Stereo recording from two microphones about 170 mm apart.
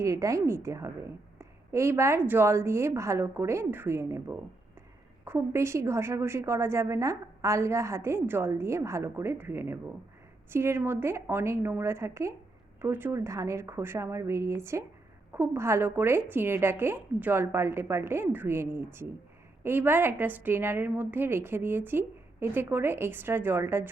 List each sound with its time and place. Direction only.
0.0 s a woman's voice: 20° right (ahead or behind)